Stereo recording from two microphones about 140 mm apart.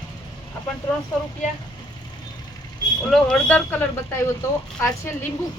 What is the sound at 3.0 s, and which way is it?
A woman's voice, 5° left (ahead or behind).